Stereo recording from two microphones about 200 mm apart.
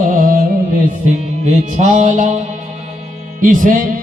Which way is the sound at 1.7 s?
35° right (ahead or behind).